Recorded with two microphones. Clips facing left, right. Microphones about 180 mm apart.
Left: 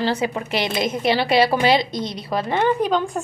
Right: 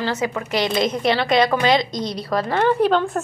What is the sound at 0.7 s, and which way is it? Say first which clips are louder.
Speech: even; 5° left (ahead or behind).